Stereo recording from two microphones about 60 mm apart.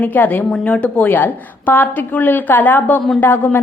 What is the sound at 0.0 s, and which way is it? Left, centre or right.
Speech, left.